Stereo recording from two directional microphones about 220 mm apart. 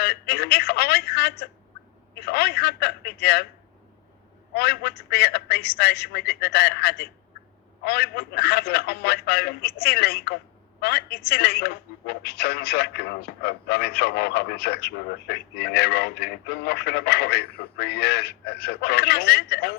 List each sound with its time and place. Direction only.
0.0 s speech: 50° left (ahead or behind)
4.5 s speech: 45° left (ahead or behind)